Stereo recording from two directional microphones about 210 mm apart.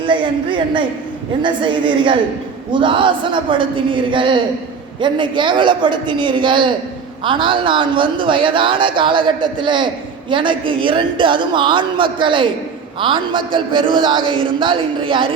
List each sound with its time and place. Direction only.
0.0 s speech: 25° right (ahead or behind)